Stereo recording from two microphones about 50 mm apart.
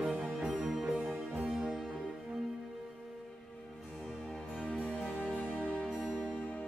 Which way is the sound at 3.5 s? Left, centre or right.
Centre.